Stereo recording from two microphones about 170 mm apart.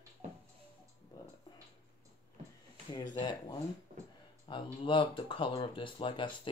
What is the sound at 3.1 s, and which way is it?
Speech, 25° left (ahead or behind).